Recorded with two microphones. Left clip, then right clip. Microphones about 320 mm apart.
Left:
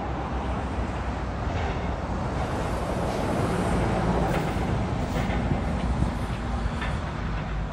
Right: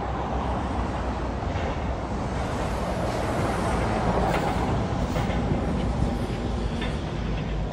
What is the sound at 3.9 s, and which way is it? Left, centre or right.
Vehicle, right.